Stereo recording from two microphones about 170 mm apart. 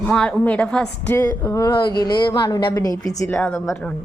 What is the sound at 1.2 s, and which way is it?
A woman's voice, 20° left (ahead or behind).